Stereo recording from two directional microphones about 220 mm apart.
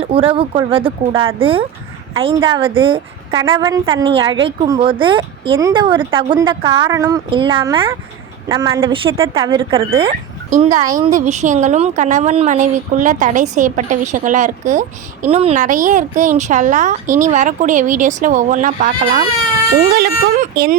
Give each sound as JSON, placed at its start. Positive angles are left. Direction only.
{"t": 0.0, "sound": "a woman's voice", "side_deg": -25}
{"t": 11.0, "sound": "a woman's voice", "side_deg": -30}